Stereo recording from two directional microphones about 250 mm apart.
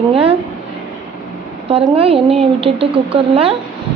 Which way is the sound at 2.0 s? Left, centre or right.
Right.